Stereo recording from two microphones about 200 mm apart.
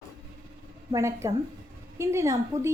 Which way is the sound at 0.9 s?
15° right (ahead or behind).